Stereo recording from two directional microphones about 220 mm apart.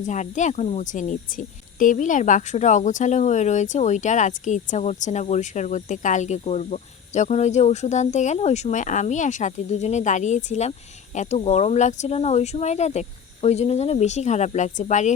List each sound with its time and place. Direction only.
0.0 s speech: 35° left (ahead or behind)